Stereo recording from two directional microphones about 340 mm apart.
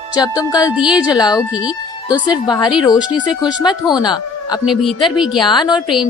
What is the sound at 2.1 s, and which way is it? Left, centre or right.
A woman's voice, centre.